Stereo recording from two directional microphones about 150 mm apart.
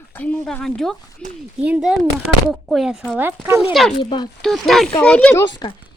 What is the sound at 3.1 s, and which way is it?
Speech, 15° right (ahead or behind).